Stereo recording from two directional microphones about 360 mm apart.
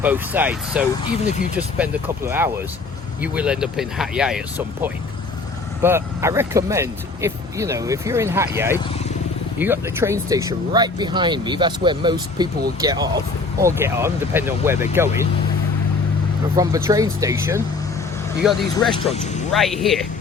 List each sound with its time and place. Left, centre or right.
0.0 s speech: centre
1.2 s speech: centre
1.5 s speech: centre
16.6 s speech: centre